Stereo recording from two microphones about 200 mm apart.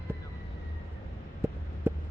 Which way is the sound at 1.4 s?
10° right (ahead or behind).